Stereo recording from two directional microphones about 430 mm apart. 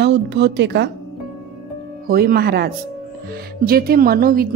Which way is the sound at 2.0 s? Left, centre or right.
Right.